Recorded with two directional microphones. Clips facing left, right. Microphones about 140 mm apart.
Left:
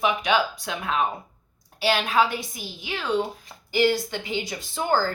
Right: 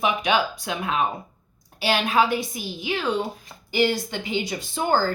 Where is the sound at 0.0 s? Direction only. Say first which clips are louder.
Even; 15° right (ahead or behind).